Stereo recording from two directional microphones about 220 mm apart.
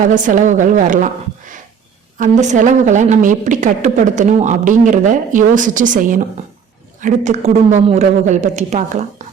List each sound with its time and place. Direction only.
0.1 s a woman's voice: 35° right (ahead or behind)